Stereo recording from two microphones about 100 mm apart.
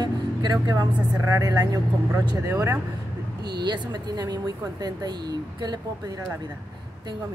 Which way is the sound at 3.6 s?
45° right (ahead or behind).